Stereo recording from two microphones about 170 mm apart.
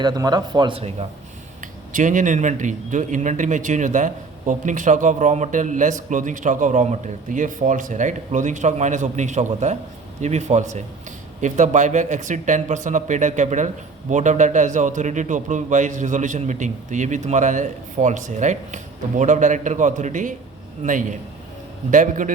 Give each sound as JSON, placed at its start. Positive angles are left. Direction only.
{"t": 0.0, "sound": "a man's voice", "side_deg": -25}
{"t": 1.6, "sound": "speech", "side_deg": -50}